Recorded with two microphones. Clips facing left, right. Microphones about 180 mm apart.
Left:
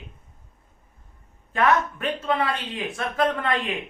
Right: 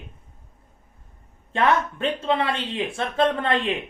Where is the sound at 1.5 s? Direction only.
25° right (ahead or behind).